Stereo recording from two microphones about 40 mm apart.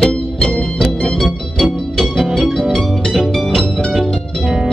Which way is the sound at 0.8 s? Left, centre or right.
Centre.